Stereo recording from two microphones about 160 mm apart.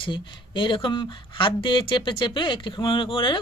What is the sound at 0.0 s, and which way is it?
Speech, 30° left (ahead or behind).